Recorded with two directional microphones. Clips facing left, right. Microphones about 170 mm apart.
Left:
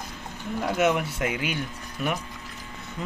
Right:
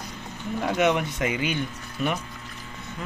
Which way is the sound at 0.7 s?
5° left (ahead or behind).